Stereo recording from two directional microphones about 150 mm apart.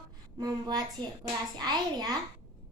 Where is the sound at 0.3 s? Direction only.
25° right (ahead or behind).